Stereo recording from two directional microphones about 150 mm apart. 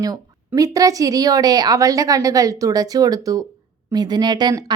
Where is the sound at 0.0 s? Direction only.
25° right (ahead or behind).